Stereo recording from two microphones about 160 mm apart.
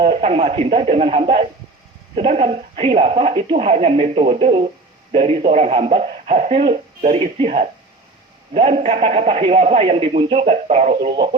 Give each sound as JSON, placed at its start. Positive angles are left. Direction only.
{"t": 0.0, "sound": "speech", "side_deg": -40}
{"t": 8.7, "sound": "speech", "side_deg": -40}